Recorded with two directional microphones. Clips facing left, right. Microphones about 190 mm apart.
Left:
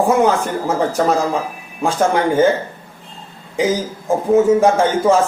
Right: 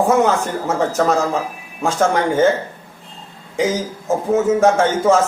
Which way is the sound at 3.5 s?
10° left (ahead or behind).